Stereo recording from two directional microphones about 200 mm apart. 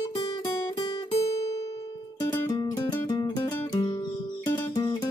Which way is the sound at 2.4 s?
20° left (ahead or behind).